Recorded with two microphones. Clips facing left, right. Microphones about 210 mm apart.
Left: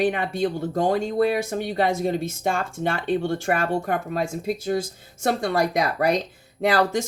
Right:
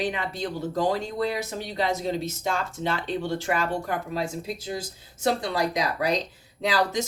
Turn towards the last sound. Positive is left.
turn(degrees=55)  # may be behind; listen again after turning